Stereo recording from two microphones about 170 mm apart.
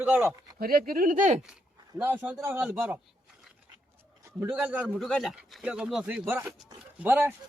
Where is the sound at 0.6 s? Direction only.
60° right (ahead or behind).